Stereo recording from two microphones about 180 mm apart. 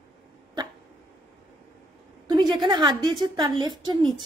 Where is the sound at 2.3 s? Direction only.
25° right (ahead or behind).